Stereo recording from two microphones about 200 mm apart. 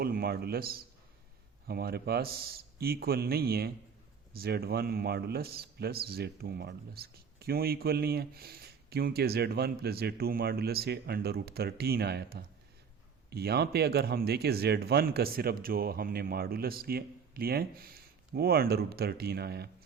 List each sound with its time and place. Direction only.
0.0 s speech: 50° right (ahead or behind)